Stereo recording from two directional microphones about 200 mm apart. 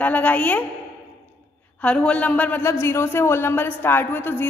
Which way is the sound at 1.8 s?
5° left (ahead or behind).